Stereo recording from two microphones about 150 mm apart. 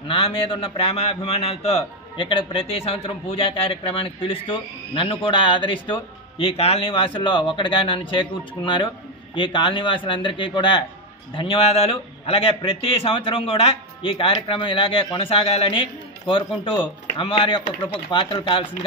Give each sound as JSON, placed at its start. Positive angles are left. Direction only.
{"t": 0.1, "sound": "a man's voice", "side_deg": 35}